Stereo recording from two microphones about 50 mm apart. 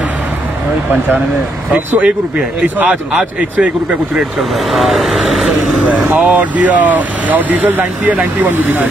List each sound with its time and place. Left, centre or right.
2.0 s speech: right
2.9 s a man's voice: centre
4.4 s speech: centre
5.9 s speech: right
8.5 s speech: right